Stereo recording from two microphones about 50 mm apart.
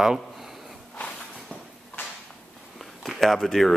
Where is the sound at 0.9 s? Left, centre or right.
Left.